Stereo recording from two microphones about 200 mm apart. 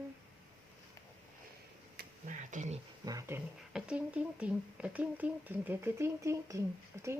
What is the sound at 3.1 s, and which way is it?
Speech, 15° right (ahead or behind).